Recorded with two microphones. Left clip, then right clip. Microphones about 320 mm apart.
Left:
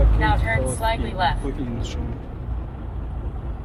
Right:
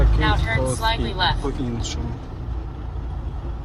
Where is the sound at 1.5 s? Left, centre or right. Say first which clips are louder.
Right 3 dB; centre.